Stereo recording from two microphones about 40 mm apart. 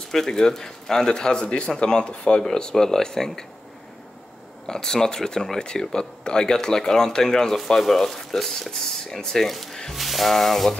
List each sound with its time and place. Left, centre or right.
0.1 s speech: centre
2.4 s speech: centre
4.6 s speech: centre
9.9 s music: centre